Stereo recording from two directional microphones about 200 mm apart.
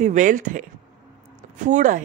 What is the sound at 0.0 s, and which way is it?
A woman's voice, 40° right (ahead or behind).